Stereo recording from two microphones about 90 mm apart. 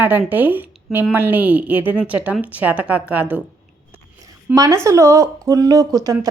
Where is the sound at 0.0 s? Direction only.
20° right (ahead or behind).